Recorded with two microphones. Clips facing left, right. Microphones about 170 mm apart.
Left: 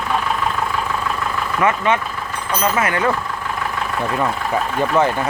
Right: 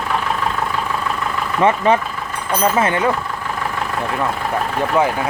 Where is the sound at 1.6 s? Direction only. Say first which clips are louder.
Right 3 dB; 35° right (ahead or behind).